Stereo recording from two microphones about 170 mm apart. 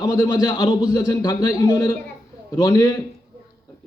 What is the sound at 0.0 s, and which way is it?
A man's voice, 20° left (ahead or behind).